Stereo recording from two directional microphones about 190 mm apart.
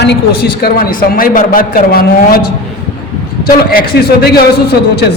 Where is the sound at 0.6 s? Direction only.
50° left (ahead or behind).